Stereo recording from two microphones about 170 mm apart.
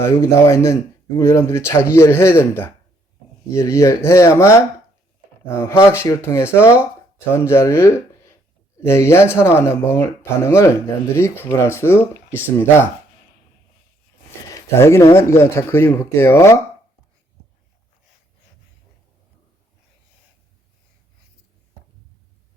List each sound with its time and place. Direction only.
0.0 s speech: 15° left (ahead or behind)
14.4 s speech: 20° left (ahead or behind)